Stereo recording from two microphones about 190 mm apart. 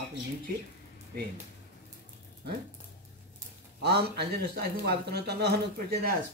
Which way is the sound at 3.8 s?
60° right (ahead or behind).